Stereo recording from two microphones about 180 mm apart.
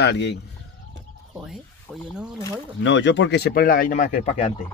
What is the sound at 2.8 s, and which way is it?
Speech, 90° left.